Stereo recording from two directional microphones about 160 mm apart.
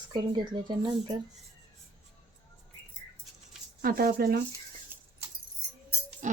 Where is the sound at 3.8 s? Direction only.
65° right (ahead or behind).